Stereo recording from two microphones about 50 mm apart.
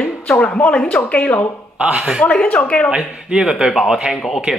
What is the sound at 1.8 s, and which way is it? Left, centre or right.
Speech, right.